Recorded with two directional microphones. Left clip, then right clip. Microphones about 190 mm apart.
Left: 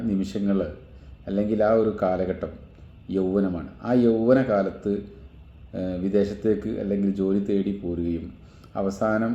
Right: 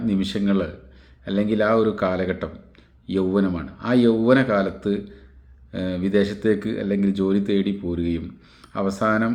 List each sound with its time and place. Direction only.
0.0 s speech: 10° right (ahead or behind)